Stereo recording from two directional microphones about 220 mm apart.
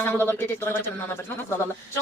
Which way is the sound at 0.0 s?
10° left (ahead or behind).